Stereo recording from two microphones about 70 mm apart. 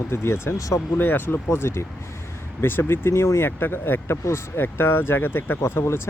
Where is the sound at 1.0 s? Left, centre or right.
Left.